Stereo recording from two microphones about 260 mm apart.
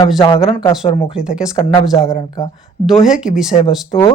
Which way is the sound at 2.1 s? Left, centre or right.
Centre.